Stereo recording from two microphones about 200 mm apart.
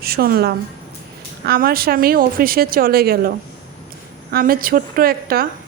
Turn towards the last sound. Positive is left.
turn(degrees=-50)  # may be behind; listen again after turning